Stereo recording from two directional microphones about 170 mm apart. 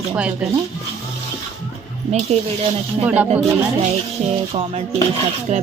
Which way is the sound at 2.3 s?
40° right (ahead or behind).